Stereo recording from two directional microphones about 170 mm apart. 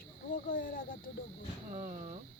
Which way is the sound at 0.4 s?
55° left (ahead or behind).